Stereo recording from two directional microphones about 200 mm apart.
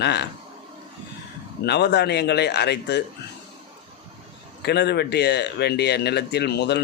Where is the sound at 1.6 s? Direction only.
55° left (ahead or behind).